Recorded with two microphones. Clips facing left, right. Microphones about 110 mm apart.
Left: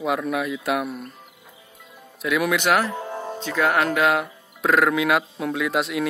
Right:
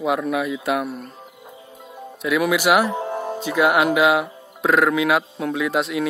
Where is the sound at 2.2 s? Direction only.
Centre (ahead or behind).